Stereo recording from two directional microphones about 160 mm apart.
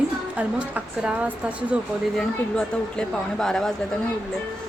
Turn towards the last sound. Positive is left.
turn(degrees=0)  # may be behind; listen again after turning